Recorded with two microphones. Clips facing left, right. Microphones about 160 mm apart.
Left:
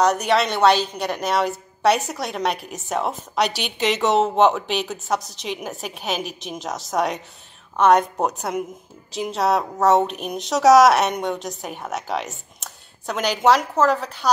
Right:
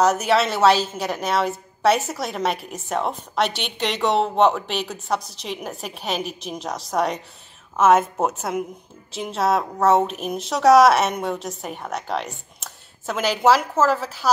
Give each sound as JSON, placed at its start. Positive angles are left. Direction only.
{"t": 0.0, "sound": "a woman's voice", "side_deg": -5}